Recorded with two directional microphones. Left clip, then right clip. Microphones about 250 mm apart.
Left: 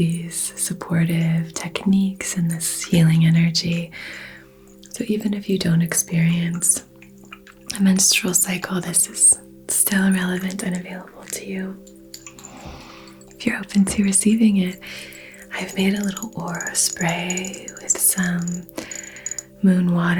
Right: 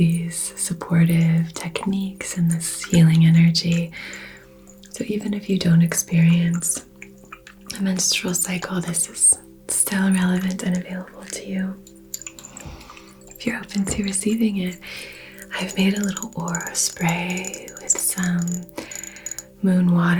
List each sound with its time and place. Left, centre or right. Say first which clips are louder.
0.0 s speech: right 1 dB; left
7.7 s speech: left 4 dB; left
13.4 s speech: left 4 dB; left
14.9 s speech: even; left
17.5 s music: even; left
19.6 s speech: even; left